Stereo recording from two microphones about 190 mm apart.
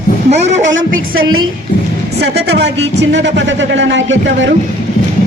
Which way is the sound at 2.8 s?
70° right (ahead or behind).